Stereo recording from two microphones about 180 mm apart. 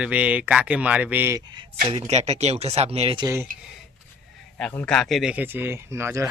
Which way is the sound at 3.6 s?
5° right (ahead or behind).